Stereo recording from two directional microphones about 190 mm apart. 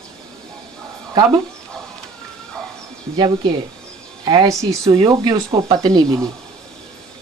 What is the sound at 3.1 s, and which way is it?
Speech, 25° right (ahead or behind).